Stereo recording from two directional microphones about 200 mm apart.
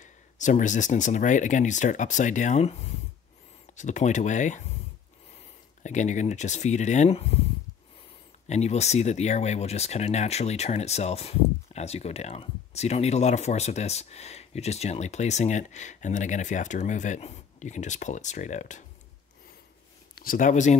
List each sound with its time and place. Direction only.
0.0 s speech: 35° left (ahead or behind)
5.8 s speech: 35° left (ahead or behind)
8.5 s speech: 35° left (ahead or behind)
20.2 s speech: 45° left (ahead or behind)